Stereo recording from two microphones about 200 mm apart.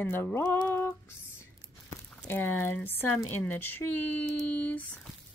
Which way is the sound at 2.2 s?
10° left (ahead or behind).